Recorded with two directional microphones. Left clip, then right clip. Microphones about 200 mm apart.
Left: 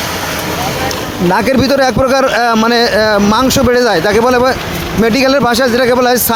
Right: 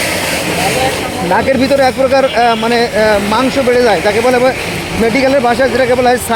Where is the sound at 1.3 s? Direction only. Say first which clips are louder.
Even; 25° left (ahead or behind).